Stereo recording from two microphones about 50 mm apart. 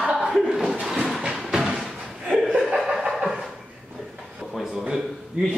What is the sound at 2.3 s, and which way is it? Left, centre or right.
Laughter, centre.